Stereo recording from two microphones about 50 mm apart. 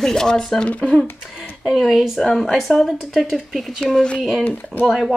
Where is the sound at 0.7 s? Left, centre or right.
Left.